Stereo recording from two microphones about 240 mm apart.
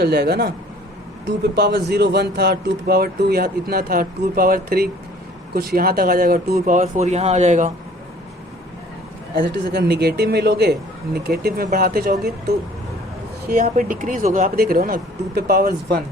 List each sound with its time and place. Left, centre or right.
0.0 s a man's voice: right
9.3 s speech: right
13.4 s speech: right